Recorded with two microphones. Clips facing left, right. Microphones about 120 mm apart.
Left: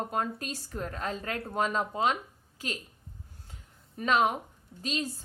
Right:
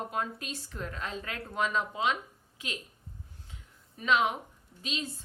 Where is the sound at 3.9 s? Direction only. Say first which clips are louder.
Left 2 dB; 40° left (ahead or behind).